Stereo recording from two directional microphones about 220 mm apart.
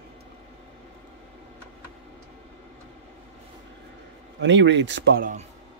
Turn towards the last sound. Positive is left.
turn(degrees=-35)  # may be behind; listen again after turning